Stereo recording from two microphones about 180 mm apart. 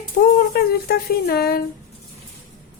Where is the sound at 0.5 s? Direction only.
60° left (ahead or behind).